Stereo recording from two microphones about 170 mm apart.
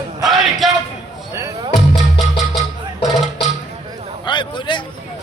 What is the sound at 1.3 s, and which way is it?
Music, 20° right (ahead or behind).